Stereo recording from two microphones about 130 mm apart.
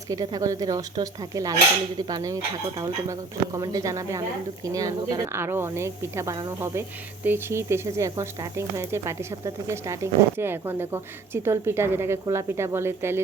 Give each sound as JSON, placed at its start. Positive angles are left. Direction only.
{"t": 0.1, "sound": "speech", "side_deg": -25}